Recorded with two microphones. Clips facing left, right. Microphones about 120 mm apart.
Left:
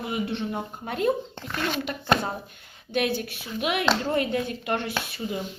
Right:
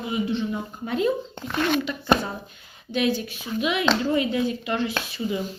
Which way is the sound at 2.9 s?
55° left (ahead or behind).